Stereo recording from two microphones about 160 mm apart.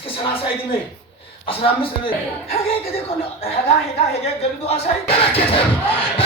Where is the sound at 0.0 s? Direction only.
35° left (ahead or behind).